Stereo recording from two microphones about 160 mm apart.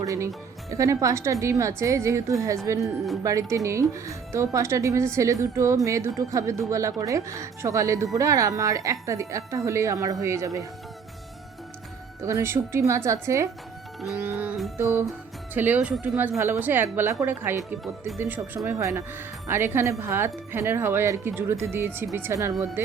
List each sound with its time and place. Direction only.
0.0 s speech: 20° right (ahead or behind)
12.2 s speech: 15° right (ahead or behind)
14.8 s speech: 15° right (ahead or behind)